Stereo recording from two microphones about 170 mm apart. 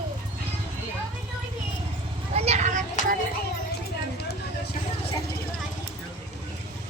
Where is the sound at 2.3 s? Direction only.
40° right (ahead or behind).